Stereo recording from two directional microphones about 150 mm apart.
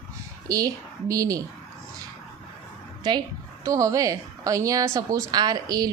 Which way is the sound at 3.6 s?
20° right (ahead or behind).